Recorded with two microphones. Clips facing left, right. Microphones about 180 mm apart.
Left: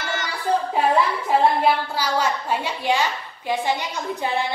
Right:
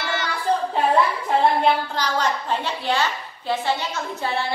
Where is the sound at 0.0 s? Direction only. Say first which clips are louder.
Right 1 dB; 45° left (ahead or behind).